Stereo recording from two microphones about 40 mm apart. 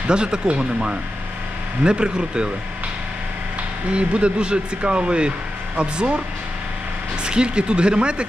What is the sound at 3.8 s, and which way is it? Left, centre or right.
Speech, right.